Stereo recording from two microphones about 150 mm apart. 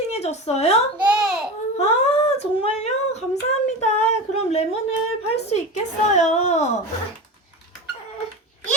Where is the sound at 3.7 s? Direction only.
50° left (ahead or behind).